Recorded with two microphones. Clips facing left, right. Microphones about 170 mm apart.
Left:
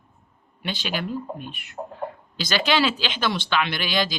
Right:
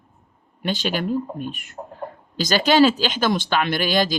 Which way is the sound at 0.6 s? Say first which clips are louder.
Right 5 dB; 45° right (ahead or behind).